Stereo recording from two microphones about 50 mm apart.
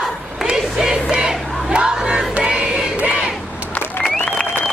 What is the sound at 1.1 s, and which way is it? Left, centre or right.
Crowd, centre.